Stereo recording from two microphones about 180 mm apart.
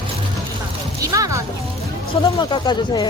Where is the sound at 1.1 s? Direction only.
20° right (ahead or behind).